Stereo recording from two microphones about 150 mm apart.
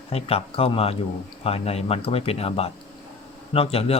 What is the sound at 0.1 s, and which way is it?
A man's voice, 40° left (ahead or behind).